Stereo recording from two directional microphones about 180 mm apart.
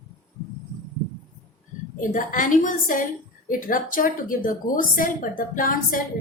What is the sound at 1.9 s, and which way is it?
A woman's voice, 45° left (ahead or behind).